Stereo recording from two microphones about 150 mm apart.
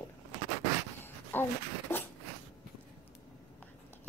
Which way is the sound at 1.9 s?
15° left (ahead or behind).